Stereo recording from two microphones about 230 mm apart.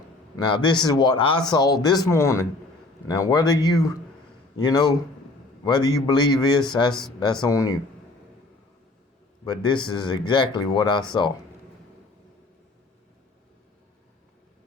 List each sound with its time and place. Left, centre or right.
0.3 s speech: centre
9.4 s speech: centre